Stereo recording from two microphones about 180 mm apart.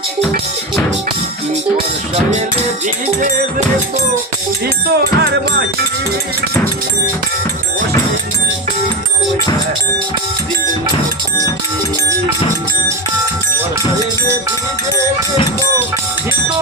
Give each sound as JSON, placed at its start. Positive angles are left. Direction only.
{"t": 4.9, "sound": "music", "side_deg": -70}